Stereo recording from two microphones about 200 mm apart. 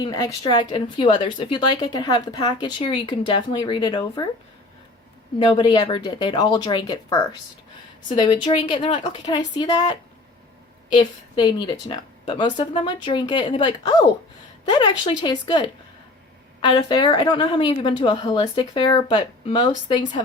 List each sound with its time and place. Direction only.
0.0 s a woman's voice: 20° left (ahead or behind)
5.4 s a woman's voice: 20° left (ahead or behind)
10.9 s a woman's voice: 20° left (ahead or behind)